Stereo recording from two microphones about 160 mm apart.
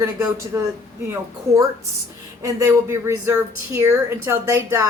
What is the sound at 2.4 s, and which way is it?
A woman's voice, 20° right (ahead or behind).